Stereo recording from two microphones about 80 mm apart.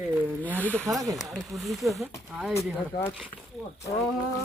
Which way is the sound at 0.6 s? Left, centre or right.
Centre.